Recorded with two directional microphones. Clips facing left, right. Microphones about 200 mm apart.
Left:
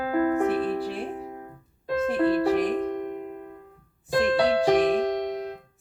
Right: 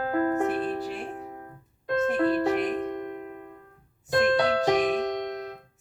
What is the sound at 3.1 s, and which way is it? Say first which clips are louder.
Keyboard: left 3 dB; 5° left (ahead or behind).